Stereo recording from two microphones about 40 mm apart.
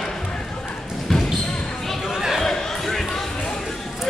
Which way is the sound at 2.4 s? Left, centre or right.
Centre.